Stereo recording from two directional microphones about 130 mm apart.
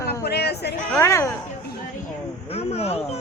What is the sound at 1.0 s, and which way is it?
Speech, 20° left (ahead or behind).